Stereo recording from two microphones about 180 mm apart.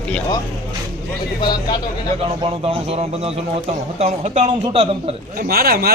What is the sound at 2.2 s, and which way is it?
A man's voice, 35° right (ahead or behind).